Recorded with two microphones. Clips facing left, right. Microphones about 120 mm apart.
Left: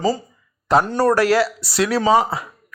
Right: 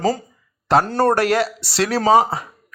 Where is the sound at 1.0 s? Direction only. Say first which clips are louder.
Left 1 dB; 60° right (ahead or behind).